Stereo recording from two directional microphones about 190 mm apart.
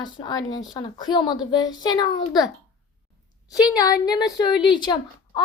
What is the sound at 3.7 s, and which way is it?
A woman's voice, 20° left (ahead or behind).